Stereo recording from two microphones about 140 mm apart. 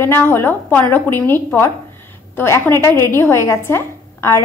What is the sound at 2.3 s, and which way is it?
A woman's voice, 15° left (ahead or behind).